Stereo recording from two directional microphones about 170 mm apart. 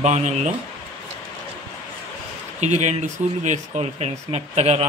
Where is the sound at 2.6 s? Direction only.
40° right (ahead or behind).